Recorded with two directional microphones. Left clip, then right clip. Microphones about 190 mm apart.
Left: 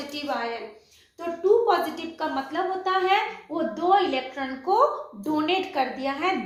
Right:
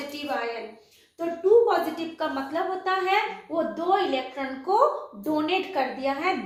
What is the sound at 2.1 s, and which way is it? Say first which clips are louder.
A woman's voice: left 1 dB; 35° left (ahead or behind).